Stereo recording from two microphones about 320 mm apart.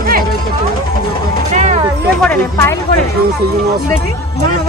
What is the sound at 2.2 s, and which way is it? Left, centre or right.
Speech, centre.